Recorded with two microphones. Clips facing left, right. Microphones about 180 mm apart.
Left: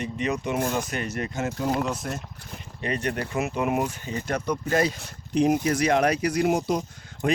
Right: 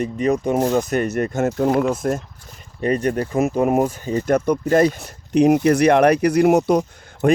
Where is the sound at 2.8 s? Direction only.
40° right (ahead or behind).